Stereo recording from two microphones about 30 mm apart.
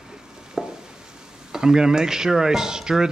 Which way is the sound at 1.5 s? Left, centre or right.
Centre.